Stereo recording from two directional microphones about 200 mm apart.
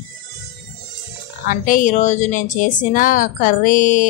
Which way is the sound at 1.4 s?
40° left (ahead or behind).